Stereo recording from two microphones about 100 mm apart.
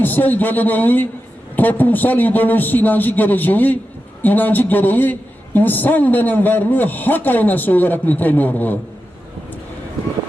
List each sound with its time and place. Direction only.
0.0 s a man's voice: 20° left (ahead or behind)